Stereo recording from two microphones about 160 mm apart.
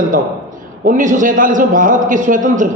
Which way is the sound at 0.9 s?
55° right (ahead or behind).